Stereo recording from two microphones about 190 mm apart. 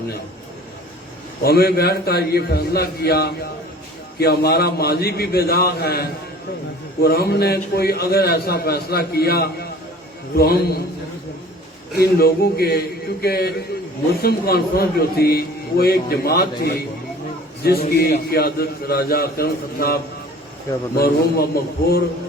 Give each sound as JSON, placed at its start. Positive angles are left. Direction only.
{"t": 1.5, "sound": "a man's voice", "side_deg": 55}
{"t": 11.9, "sound": "a man's voice", "side_deg": 55}